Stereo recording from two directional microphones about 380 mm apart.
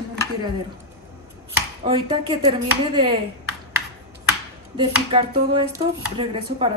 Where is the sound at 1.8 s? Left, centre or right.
Centre.